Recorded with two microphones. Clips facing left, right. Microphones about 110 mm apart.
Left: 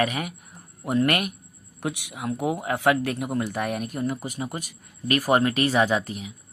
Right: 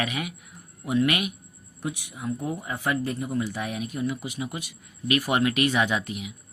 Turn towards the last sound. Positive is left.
turn(degrees=35)  # may be behind; listen again after turning